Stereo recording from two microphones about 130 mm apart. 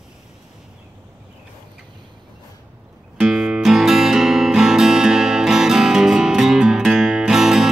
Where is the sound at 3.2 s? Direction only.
5° right (ahead or behind).